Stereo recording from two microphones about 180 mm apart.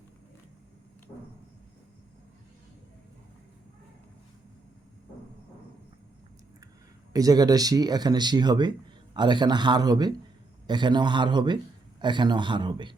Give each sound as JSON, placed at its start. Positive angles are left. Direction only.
{"t": 7.1, "sound": "speech", "side_deg": -20}